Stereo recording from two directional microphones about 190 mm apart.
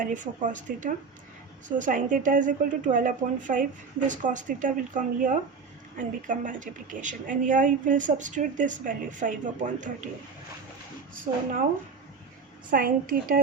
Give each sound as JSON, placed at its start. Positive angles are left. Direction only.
{"t": 0.0, "sound": "a woman's voice", "side_deg": -40}
{"t": 12.7, "sound": "a woman's voice", "side_deg": -50}